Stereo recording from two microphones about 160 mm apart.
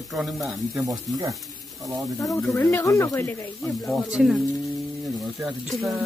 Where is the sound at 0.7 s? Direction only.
20° right (ahead or behind).